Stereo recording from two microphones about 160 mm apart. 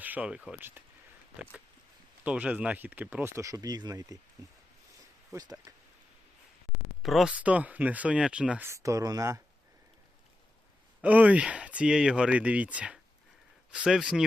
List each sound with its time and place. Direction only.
0.0 s speech: 10° right (ahead or behind)
2.2 s speech: 10° right (ahead or behind); by 4.2 s 25° right (ahead or behind)
5.3 s speech: 25° right (ahead or behind)
7.0 s speech: centre (ahead or behind); by 9.4 s 20° right (ahead or behind)
11.0 s speech: 10° right (ahead or behind)